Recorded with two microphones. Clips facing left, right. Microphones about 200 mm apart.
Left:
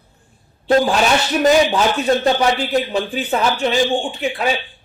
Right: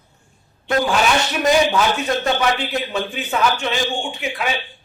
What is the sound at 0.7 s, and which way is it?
Speech, 30° left (ahead or behind).